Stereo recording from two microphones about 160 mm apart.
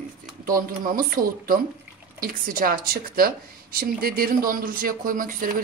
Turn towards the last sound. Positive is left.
turn(degrees=-55)  # may be behind; listen again after turning